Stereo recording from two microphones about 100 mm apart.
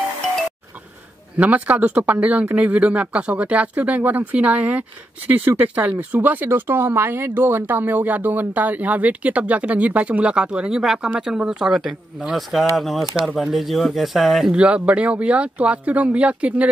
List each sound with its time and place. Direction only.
1.3 s speech: 15° right (ahead or behind)